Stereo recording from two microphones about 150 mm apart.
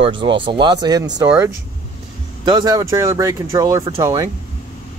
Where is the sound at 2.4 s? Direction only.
25° right (ahead or behind).